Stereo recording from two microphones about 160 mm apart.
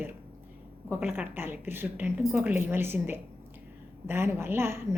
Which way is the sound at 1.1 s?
15° right (ahead or behind).